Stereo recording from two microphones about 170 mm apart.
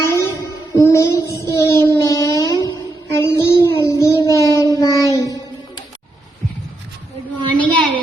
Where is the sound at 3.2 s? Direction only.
15° left (ahead or behind).